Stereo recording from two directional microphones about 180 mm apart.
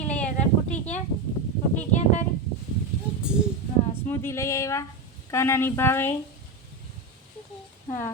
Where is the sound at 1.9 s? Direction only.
40° left (ahead or behind).